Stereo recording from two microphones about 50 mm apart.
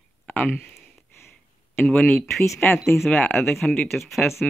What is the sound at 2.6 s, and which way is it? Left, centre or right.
Speech, left.